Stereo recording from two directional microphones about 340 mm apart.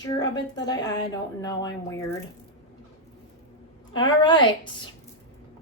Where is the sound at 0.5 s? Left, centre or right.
Centre.